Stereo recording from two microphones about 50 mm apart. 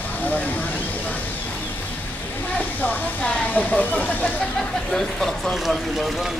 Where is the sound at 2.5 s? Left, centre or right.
Left.